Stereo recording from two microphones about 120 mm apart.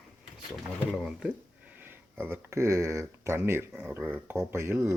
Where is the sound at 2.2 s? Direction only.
20° right (ahead or behind).